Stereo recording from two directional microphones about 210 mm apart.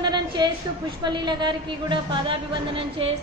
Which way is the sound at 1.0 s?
20° right (ahead or behind).